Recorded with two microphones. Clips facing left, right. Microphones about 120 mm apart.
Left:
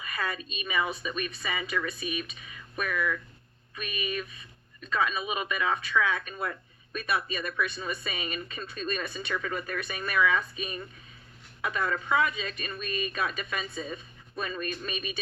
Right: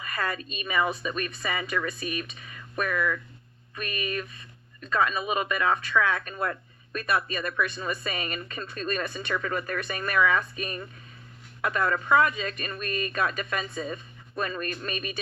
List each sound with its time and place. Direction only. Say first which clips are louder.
0.0 s speech: right 3 dB; 45° right (ahead or behind)